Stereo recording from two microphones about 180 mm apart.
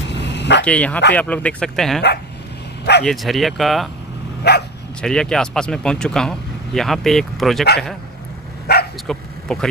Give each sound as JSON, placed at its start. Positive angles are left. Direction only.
{"t": 0.1, "sound": "dog", "side_deg": 75}
{"t": 0.7, "sound": "speech", "side_deg": 5}
{"t": 3.1, "sound": "speech", "side_deg": 0}
{"t": 4.4, "sound": "speech", "side_deg": 65}
{"t": 5.0, "sound": "speech", "side_deg": 5}
{"t": 8.7, "sound": "bow-wow", "side_deg": 65}
{"t": 9.0, "sound": "bow-wow", "side_deg": 5}